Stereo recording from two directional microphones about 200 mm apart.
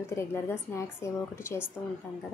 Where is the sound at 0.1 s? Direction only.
15° left (ahead or behind).